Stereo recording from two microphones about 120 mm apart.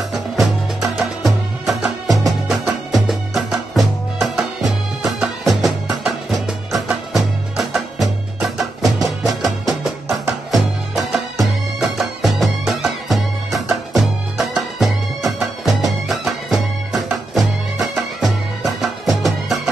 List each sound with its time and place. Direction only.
0.1 s music: centre (ahead or behind)
9.7 s music: 25° right (ahead or behind)
10.5 s music: centre (ahead or behind)